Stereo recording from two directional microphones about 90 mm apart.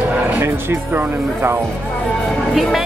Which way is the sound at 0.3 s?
25° right (ahead or behind).